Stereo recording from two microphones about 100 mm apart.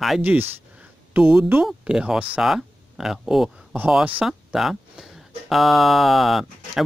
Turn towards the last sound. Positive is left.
turn(degrees=0)  # may be behind; listen again after turning